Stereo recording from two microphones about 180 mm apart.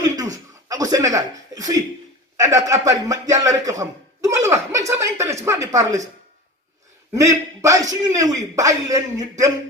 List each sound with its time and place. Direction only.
0.0 s a sound: 20° right (ahead or behind)
2.4 s speech: 20° right (ahead or behind)
7.1 s speech: 15° right (ahead or behind)